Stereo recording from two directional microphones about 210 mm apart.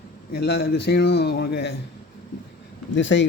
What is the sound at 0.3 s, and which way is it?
A man's voice, 50° left (ahead or behind).